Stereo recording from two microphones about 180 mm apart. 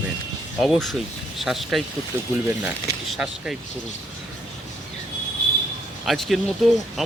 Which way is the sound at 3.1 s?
5° right (ahead or behind).